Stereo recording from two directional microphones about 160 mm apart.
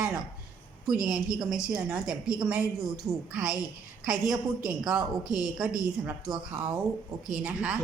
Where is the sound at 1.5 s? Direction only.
5° right (ahead or behind).